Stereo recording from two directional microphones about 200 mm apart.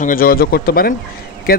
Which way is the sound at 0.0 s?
45° left (ahead or behind).